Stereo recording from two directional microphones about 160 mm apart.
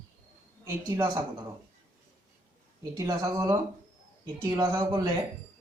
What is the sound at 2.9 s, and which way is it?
A man's voice, 25° right (ahead or behind).